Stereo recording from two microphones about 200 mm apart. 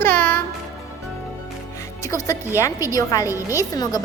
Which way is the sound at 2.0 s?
15° left (ahead or behind).